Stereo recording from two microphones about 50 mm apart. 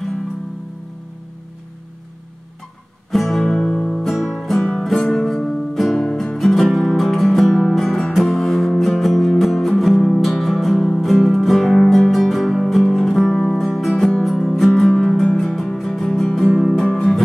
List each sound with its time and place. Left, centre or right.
3.1 s music: centre
3.4 s music: centre
4.0 s music: centre